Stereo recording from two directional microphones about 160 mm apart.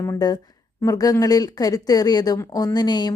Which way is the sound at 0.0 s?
25° left (ahead or behind).